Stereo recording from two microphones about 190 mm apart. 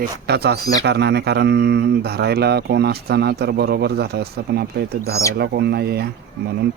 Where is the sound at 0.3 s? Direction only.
60° right (ahead or behind).